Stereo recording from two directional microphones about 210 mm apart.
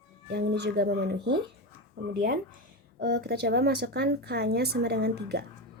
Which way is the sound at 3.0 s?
55° right (ahead or behind).